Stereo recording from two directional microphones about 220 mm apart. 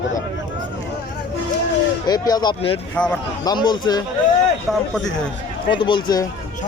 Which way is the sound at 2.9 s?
5° left (ahead or behind).